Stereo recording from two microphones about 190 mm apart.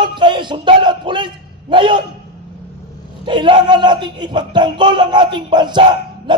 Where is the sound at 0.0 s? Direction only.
25° right (ahead or behind).